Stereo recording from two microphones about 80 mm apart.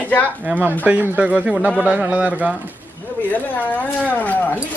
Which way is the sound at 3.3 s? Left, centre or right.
Left.